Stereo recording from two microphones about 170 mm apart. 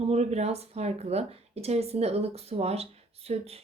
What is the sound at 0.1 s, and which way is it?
Speech, 40° right (ahead or behind).